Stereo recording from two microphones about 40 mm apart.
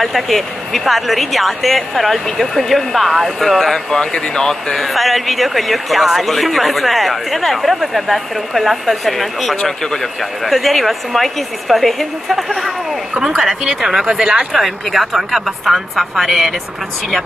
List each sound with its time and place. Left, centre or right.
0.0 s speech: centre
4.8 s speech: centre
13.4 s speech: centre
14.5 s speech: centre